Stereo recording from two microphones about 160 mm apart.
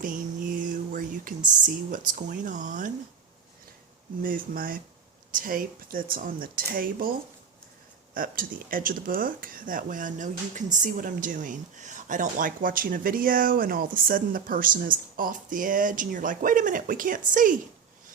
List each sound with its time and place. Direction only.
0.6 s a sound: 55° right (ahead or behind)
1.5 s speech: 55° right (ahead or behind)
4.2 s speech: 60° right (ahead or behind)
8.1 s speech: 60° right (ahead or behind)